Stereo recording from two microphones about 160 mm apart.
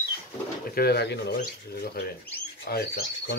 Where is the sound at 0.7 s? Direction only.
85° left.